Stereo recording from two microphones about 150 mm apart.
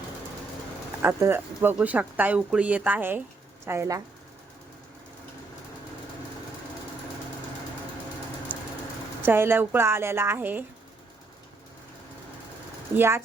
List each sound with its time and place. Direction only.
1.0 s speech: 15° right (ahead or behind)
8.5 s a sound: 10° right (ahead or behind)
9.2 s speech: 15° right (ahead or behind)
13.0 s speech: 15° right (ahead or behind)